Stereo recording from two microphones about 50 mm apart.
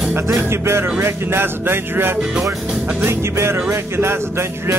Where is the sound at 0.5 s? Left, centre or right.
Right.